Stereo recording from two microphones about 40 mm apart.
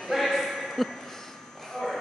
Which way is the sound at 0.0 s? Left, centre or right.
Centre.